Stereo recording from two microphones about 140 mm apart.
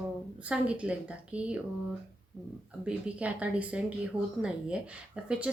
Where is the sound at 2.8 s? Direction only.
10° right (ahead or behind).